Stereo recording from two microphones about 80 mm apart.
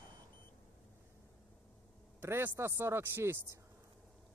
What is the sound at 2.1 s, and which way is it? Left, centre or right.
A man's voice, right.